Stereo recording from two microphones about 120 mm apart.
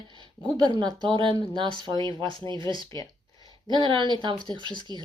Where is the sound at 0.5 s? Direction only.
40° right (ahead or behind).